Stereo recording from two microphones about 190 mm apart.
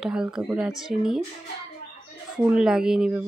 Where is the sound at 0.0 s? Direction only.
5° right (ahead or behind).